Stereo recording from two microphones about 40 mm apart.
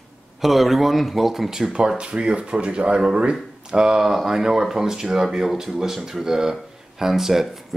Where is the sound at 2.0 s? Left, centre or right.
Right.